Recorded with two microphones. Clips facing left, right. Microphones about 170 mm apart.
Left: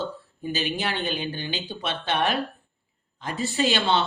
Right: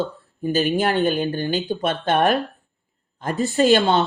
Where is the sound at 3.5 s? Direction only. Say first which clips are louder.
Right 7 dB; 45° right (ahead or behind).